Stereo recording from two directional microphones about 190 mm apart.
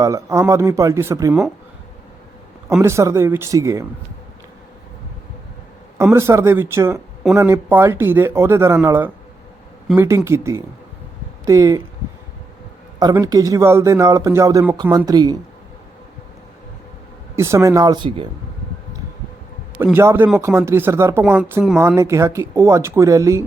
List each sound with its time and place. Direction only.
0.0 s speech: 15° right (ahead or behind)
2.8 s speech: 15° right (ahead or behind)
6.0 s speech: 15° right (ahead or behind)
13.0 s speech: 20° right (ahead or behind)
17.3 s speech: 15° right (ahead or behind)
19.8 s speech: 10° right (ahead or behind)